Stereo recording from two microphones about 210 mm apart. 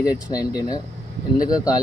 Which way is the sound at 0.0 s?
15° left (ahead or behind).